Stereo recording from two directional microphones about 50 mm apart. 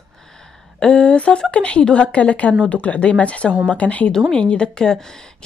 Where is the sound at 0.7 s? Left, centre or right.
Centre.